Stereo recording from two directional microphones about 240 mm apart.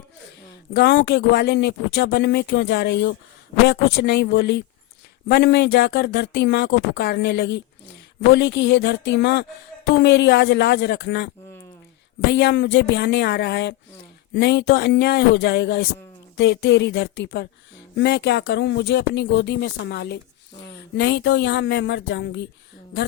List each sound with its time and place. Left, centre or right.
0.7 s speech: left
12.3 s speech: left